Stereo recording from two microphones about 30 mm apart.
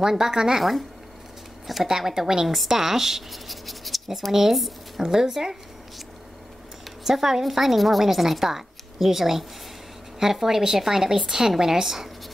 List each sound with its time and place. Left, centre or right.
0.0 s a woman's voice: centre
0.6 s speech: centre
1.9 s a woman's voice: centre
2.4 s speech: centre
2.7 s a woman's voice: centre
4.3 s a woman's voice: centre
4.6 s a sound: centre
5.0 s a woman's voice: centre
7.1 s a woman's voice: centre